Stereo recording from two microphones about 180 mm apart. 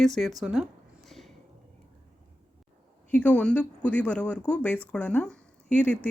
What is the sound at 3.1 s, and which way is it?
A woman's voice, 5° left (ahead or behind).